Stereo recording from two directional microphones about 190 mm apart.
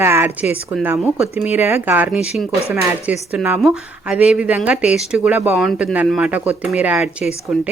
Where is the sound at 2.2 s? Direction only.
35° left (ahead or behind).